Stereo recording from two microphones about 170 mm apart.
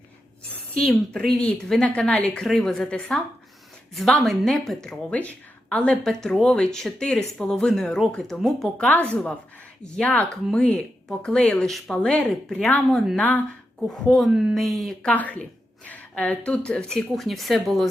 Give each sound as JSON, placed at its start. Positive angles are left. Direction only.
{"t": 1.4, "sound": "speech", "side_deg": 5}